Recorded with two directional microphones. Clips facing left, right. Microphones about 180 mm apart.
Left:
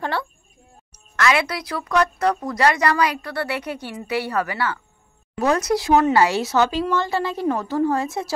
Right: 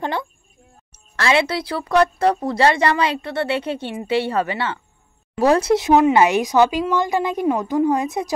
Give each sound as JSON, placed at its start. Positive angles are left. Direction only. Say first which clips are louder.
{"t": 0.0, "sound": "a woman's voice", "louder": "right 1 dB", "side_deg": -20}